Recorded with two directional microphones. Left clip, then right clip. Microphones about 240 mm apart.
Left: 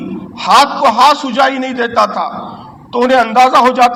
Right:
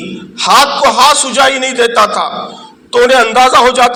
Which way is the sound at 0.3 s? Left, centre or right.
Right.